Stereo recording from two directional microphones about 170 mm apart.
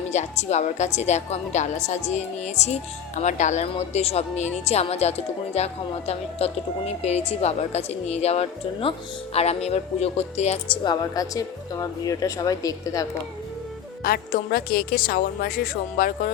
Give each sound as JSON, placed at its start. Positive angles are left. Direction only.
{"t": 0.1, "sound": "speech", "side_deg": 40}
{"t": 10.8, "sound": "speech", "side_deg": 20}
{"t": 14.0, "sound": "a woman's voice", "side_deg": 60}